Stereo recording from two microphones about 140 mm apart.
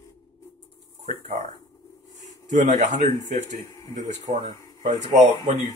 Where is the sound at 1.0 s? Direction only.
60° right (ahead or behind).